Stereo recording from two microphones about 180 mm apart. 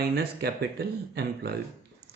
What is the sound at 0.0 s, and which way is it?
Speech, 60° right (ahead or behind).